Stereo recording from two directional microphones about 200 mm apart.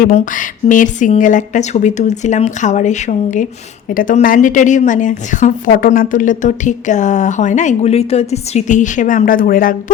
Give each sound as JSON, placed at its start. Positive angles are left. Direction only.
{"t": 0.0, "sound": "a woman's voice", "side_deg": 45}